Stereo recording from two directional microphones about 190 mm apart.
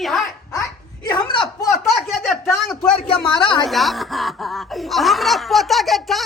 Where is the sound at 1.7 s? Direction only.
Centre (ahead or behind).